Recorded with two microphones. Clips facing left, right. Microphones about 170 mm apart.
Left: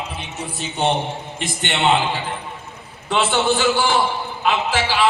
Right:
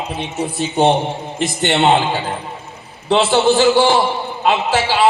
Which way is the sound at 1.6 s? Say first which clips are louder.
Right 4 dB; 40° right (ahead or behind).